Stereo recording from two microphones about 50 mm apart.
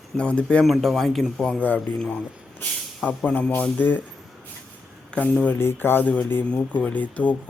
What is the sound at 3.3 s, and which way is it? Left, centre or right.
Speech, left.